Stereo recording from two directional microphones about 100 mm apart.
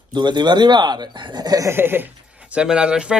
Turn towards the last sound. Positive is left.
turn(degrees=-10)  # may be behind; listen again after turning